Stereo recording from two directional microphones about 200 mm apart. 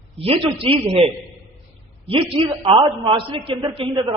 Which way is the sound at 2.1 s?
25° right (ahead or behind).